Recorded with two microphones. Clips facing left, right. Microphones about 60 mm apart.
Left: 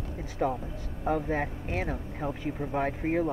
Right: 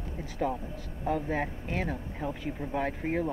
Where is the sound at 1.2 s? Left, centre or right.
Centre.